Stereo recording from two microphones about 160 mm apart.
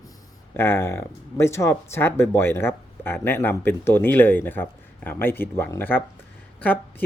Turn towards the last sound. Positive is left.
turn(degrees=10)  # may be behind; listen again after turning